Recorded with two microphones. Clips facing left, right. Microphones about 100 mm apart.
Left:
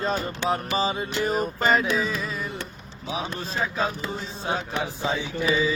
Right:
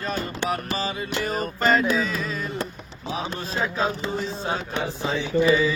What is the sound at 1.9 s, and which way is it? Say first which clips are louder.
Carnatic music: right 1 dB; 5° left (ahead or behind).